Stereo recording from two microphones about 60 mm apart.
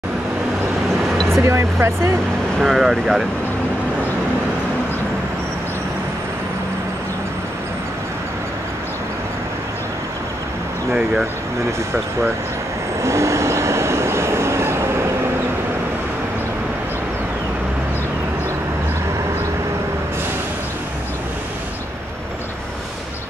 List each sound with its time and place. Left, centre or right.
1.3 s speech: right
2.6 s speech: centre
10.9 s speech: centre
13.0 s vehicle: right